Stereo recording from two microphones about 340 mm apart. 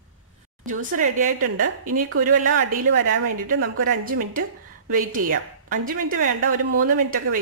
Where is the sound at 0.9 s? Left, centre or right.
Right.